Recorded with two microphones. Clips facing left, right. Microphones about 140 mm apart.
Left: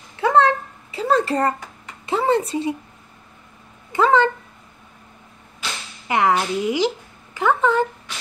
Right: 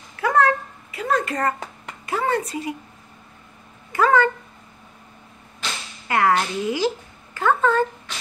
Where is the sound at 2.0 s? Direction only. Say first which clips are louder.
Left 4 dB; 25° left (ahead or behind).